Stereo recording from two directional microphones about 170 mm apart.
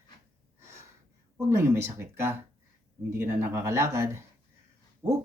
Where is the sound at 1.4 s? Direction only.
15° right (ahead or behind).